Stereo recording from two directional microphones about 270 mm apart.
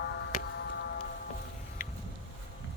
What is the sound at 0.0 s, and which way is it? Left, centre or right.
Tick-tock, left.